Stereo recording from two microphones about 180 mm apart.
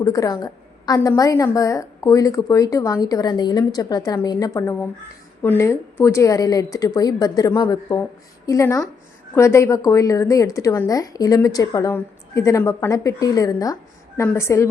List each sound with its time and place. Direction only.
0.0 s a woman's voice: 20° left (ahead or behind)